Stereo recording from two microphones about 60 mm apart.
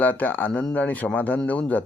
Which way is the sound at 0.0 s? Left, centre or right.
Left.